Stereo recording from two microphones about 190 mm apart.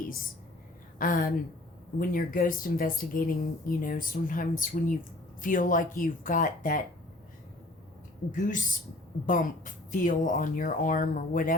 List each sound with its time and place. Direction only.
0.9 s speech: 45° left (ahead or behind)
8.3 s speech: 40° left (ahead or behind)